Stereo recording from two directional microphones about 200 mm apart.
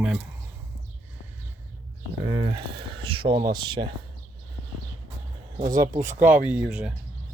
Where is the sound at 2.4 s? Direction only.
25° right (ahead or behind).